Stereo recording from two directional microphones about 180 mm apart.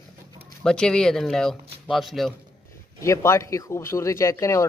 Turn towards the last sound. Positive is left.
turn(degrees=15)  # may be behind; listen again after turning